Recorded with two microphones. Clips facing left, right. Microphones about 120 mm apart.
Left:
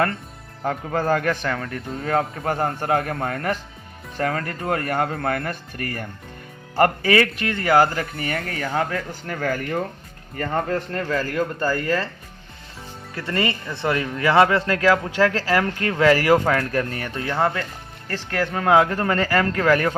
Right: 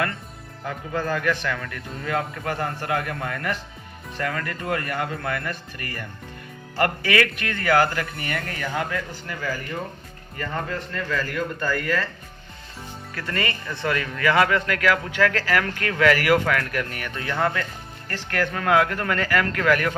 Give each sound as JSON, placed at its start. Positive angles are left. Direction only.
{"t": 0.9, "sound": "speech", "side_deg": 50}
{"t": 3.2, "sound": "speech", "side_deg": 35}
{"t": 10.3, "sound": "speech", "side_deg": 45}
{"t": 13.1, "sound": "a man's voice", "side_deg": 25}